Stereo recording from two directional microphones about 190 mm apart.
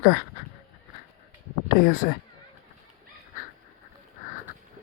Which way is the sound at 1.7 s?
50° left (ahead or behind).